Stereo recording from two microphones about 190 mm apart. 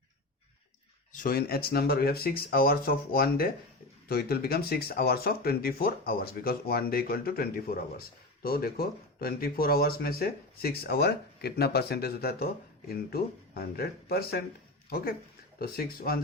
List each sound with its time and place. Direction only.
1.1 s speech: 50° left (ahead or behind)